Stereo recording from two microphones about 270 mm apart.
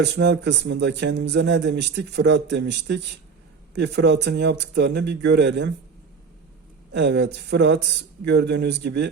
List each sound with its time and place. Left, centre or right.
0.0 s speech: right
6.9 s speech: right